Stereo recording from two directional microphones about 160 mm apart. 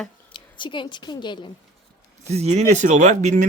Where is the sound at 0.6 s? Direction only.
30° left (ahead or behind).